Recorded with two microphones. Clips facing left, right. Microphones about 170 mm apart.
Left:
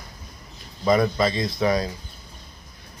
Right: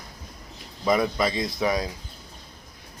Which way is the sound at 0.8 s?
5° right (ahead or behind).